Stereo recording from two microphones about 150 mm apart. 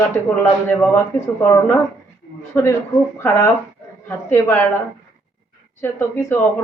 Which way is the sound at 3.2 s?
20° left (ahead or behind).